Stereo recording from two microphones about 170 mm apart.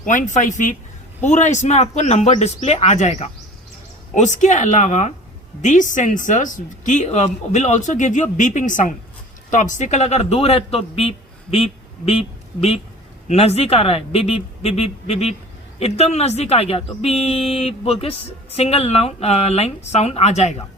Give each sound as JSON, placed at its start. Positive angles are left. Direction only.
{"t": 0.0, "sound": "a man's voice", "side_deg": 50}